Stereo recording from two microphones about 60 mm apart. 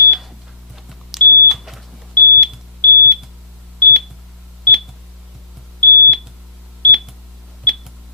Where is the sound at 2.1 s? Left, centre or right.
Left.